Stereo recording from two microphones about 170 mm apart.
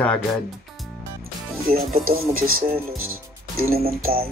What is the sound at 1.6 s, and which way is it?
Speech, 60° right (ahead or behind).